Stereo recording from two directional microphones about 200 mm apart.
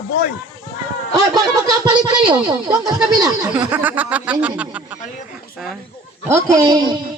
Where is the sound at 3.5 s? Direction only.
5° right (ahead or behind).